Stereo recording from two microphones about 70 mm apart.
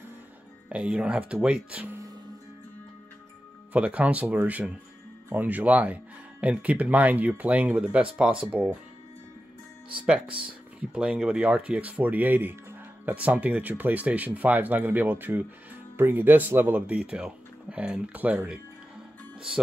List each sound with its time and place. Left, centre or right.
0.7 s speech: centre
3.7 s speech: centre
10.0 s speech: centre
16.8 s speech: centre